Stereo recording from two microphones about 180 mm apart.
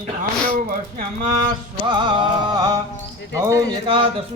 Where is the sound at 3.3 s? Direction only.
15° right (ahead or behind).